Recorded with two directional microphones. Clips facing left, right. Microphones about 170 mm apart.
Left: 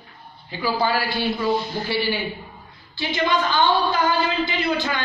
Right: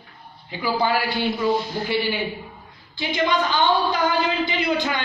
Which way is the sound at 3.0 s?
15° right (ahead or behind).